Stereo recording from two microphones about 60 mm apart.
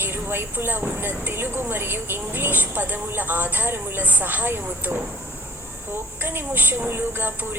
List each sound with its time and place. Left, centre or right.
0.0 s a woman's voice: right
6.2 s a woman's voice: right